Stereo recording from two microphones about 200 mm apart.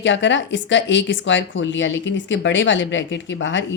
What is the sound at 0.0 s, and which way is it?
Speech, 65° left (ahead or behind).